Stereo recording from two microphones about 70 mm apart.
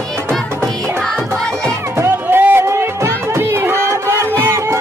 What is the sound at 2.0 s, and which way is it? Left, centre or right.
Music, right.